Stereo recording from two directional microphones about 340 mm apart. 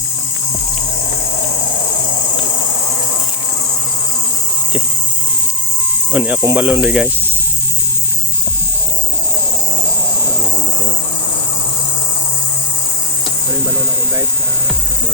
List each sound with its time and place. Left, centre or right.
6.1 s speech: centre